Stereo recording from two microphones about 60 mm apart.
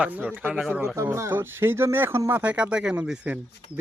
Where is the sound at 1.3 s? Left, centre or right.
Right.